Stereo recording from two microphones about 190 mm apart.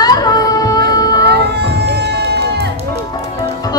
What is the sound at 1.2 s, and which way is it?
Music, 60° right (ahead or behind).